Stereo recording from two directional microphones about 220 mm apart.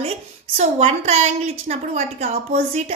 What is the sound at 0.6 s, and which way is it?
A woman's voice, 30° right (ahead or behind).